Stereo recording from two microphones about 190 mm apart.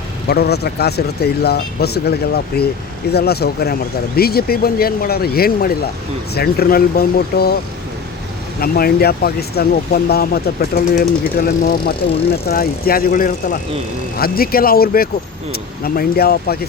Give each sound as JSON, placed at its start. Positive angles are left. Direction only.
{"t": 0.3, "sound": "speech", "side_deg": 60}
{"t": 8.6, "sound": "speech", "side_deg": 50}